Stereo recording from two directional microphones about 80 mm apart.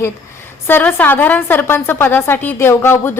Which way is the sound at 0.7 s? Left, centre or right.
Left.